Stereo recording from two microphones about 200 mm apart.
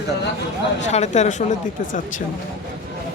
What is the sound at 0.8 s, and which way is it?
Speech, 35° left (ahead or behind).